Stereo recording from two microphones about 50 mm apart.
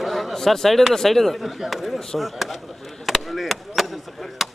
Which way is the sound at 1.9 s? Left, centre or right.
Centre.